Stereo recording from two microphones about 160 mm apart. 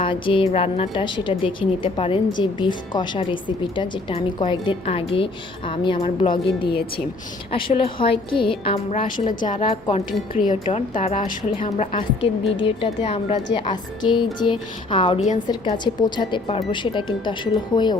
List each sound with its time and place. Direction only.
0.0 s a woman's voice: 30° left (ahead or behind)
10.8 s a woman's voice: 40° left (ahead or behind)
13.5 s a woman's voice: 30° left (ahead or behind)